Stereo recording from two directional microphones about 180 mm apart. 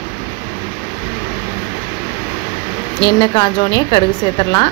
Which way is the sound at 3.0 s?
25° left (ahead or behind).